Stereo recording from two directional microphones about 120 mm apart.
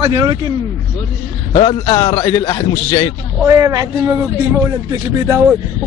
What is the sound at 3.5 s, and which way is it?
A man's voice, 25° right (ahead or behind).